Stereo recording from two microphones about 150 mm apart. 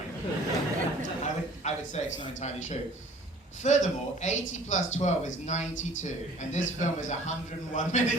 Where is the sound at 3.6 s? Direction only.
50° left (ahead or behind).